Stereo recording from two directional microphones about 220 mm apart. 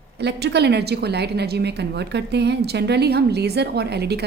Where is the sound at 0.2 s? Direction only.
50° right (ahead or behind).